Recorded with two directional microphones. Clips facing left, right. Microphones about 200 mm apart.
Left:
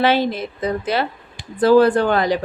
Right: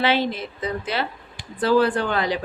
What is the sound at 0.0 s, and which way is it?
Speech, 45° left (ahead or behind).